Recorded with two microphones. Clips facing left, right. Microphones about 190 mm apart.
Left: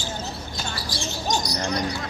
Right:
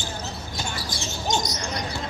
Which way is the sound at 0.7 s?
20° right (ahead or behind).